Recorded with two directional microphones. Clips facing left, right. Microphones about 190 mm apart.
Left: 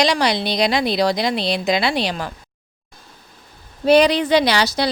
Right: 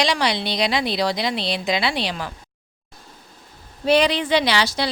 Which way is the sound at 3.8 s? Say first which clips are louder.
Left 4 dB; 40° left (ahead or behind).